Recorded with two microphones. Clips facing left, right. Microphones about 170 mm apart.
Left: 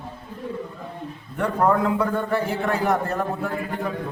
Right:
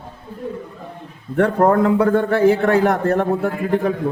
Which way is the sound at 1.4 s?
55° right (ahead or behind).